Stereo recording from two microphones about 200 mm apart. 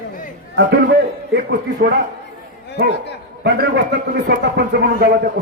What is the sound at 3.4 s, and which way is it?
A man's voice, 60° right (ahead or behind).